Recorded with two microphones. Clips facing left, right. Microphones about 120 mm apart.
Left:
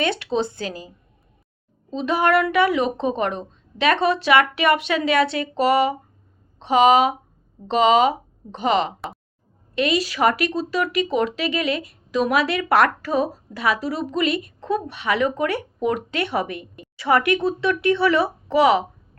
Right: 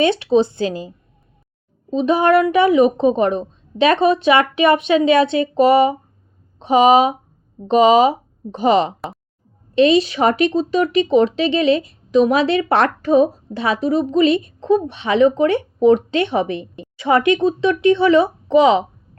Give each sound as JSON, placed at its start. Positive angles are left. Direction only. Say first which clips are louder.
{"t": 0.0, "sound": "speech", "louder": "right 8 dB", "side_deg": -20}
{"t": 9.0, "sound": "a sound", "louder": "right 3 dB", "side_deg": 0}
{"t": 9.7, "sound": "speech", "louder": "right 8 dB", "side_deg": -25}